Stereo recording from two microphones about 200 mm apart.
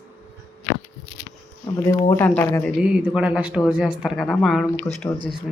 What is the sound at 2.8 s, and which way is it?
Speech, 5° right (ahead or behind).